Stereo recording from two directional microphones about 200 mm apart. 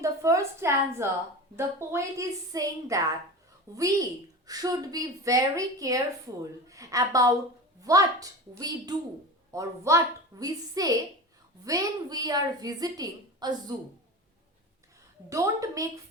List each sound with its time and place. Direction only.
0.0 s a woman's voice: 15° right (ahead or behind)
15.3 s a woman's voice: 15° right (ahead or behind)